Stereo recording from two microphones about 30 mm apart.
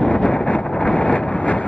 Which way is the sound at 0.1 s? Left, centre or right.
Left.